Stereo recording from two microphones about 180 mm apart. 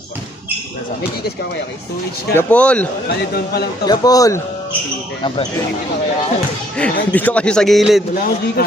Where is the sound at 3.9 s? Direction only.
20° left (ahead or behind).